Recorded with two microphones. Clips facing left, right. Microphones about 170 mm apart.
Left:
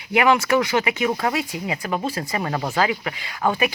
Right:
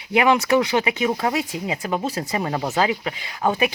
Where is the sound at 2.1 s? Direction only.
20° right (ahead or behind).